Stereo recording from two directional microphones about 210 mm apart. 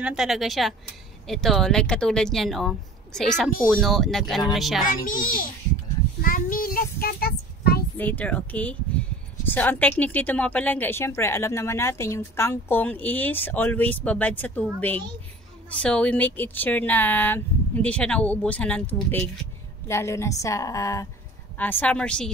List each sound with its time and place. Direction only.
0.0 s speech: centre (ahead or behind)
4.8 s a child's voice: 40° left (ahead or behind)
6.2 s child singing: 40° left (ahead or behind)
8.0 s a woman's voice: 10° left (ahead or behind)